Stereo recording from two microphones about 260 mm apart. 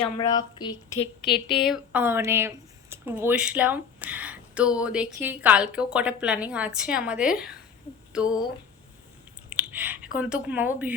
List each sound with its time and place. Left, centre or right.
0.0 s speech: centre
0.9 s a woman's voice: left
1.5 s speech: centre
9.5 s chewing: centre
10.2 s speech: centre